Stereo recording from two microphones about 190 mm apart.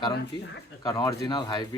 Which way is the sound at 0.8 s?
15° left (ahead or behind).